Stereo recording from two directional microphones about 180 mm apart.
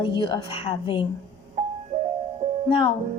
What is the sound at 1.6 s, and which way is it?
Music, 45° right (ahead or behind).